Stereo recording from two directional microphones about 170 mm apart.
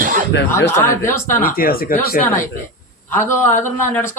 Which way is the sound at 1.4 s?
60° left (ahead or behind).